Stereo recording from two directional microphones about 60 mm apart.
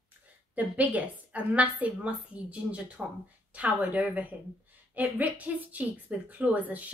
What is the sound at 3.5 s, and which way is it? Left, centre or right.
A woman's voice, right.